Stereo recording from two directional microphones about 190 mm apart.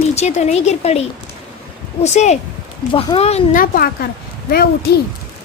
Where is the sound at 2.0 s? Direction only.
35° left (ahead or behind).